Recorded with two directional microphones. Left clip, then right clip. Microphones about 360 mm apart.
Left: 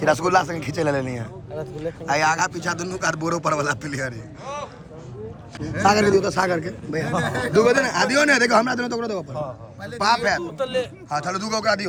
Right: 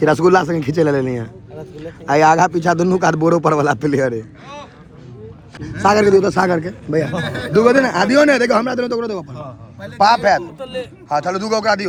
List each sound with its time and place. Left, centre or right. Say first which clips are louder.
0.0 s a man's voice: right 6 dB; centre
4.4 s speech: left 3 dB; right
5.6 s a man's voice: right 5 dB; centre